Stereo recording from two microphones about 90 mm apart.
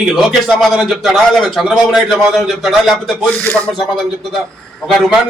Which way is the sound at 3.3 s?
20° left (ahead or behind).